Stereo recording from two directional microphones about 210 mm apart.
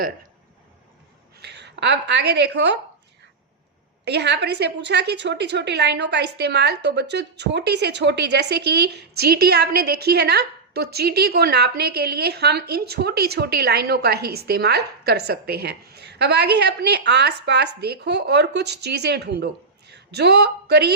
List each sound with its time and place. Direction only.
1.4 s speech: 55° right (ahead or behind)
4.0 s a woman's voice: 55° right (ahead or behind)